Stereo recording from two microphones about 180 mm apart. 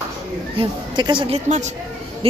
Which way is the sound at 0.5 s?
25° right (ahead or behind).